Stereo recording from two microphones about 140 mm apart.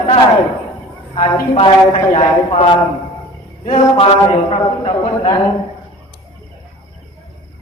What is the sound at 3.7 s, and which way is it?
A man's voice, 40° left (ahead or behind).